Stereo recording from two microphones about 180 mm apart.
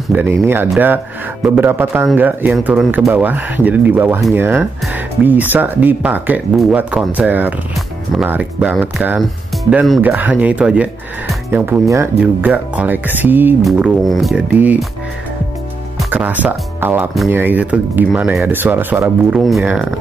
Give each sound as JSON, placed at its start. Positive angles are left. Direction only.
{"t": 0.1, "sound": "speech", "side_deg": -10}
{"t": 16.0, "sound": "speech", "side_deg": -5}